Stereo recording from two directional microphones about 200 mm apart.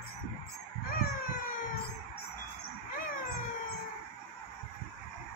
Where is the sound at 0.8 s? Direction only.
45° left (ahead or behind).